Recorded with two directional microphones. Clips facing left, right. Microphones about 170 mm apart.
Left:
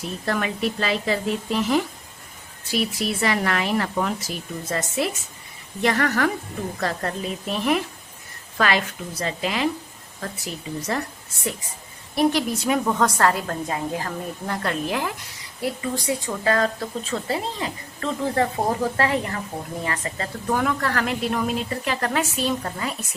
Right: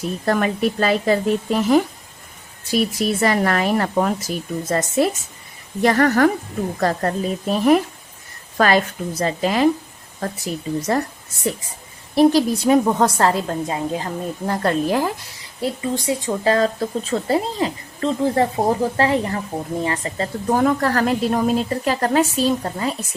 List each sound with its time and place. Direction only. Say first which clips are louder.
0.3 s a woman's voice: right 5 dB; 45° right (ahead or behind)
12.1 s speech: right 6 dB; 35° right (ahead or behind)
14.4 s a woman's voice: right 7 dB; 35° right (ahead or behind)
15.6 s a woman's voice: right 3 dB; 25° right (ahead or behind)